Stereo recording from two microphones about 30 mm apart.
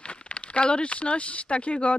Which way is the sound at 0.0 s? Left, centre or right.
Left.